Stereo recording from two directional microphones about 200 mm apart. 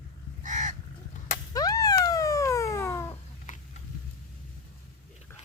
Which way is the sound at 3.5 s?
40° left (ahead or behind).